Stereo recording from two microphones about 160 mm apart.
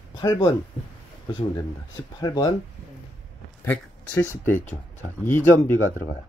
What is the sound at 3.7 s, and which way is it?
Speech, 10° left (ahead or behind).